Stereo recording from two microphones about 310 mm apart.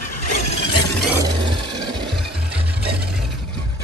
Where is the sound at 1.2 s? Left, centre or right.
Centre.